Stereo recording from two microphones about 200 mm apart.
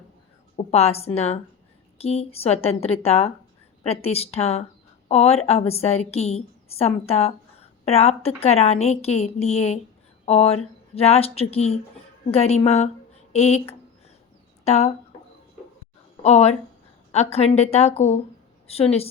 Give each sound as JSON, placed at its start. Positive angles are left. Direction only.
{"t": 0.5, "sound": "a woman's voice", "side_deg": 30}
{"t": 14.6, "sound": "speech", "side_deg": 35}
{"t": 16.2, "sound": "a woman's voice", "side_deg": 35}